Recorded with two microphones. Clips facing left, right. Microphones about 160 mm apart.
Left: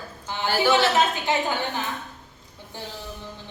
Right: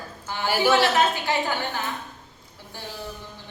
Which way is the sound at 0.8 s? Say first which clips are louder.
Even; 20° left (ahead or behind).